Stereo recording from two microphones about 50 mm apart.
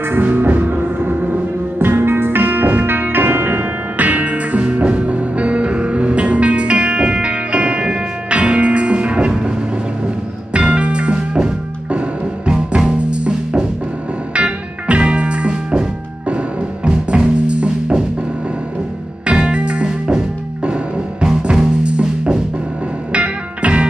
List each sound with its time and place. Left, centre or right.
0.2 s music: right
19.2 s music: centre